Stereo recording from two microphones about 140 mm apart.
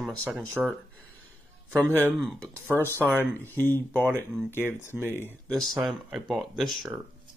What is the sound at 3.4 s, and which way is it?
Speech, 15° left (ahead or behind).